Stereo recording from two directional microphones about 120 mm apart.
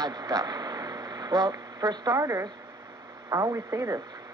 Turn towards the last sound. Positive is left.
turn(degrees=-35)  # may be behind; listen again after turning